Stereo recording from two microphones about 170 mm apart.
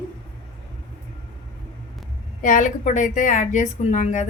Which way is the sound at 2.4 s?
50° left (ahead or behind).